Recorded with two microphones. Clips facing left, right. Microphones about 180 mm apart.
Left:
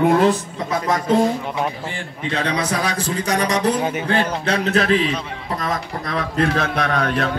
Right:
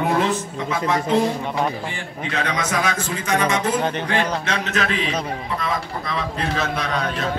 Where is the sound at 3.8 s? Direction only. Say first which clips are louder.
Left 1 dB; 5° left (ahead or behind).